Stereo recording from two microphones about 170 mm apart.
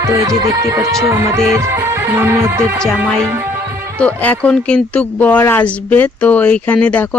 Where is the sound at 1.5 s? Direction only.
15° right (ahead or behind).